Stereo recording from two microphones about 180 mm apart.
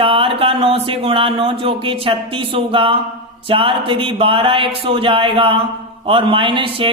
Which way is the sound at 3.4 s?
30° right (ahead or behind).